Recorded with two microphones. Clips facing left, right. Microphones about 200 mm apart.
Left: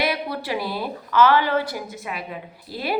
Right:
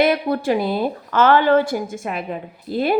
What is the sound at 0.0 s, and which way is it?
A woman's voice, 50° right (ahead or behind).